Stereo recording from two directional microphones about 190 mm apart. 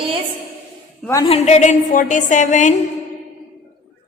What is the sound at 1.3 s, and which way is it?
A woman's voice, 35° left (ahead or behind).